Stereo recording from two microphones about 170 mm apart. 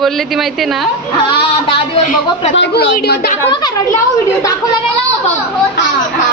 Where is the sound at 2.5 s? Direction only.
90° left.